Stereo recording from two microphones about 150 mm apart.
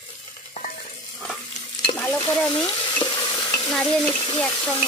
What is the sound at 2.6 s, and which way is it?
Stir, 25° left (ahead or behind).